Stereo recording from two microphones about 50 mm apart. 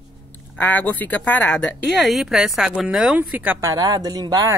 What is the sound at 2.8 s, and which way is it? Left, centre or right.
Speech, centre.